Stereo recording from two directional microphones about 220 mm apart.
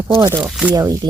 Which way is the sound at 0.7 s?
15° right (ahead or behind).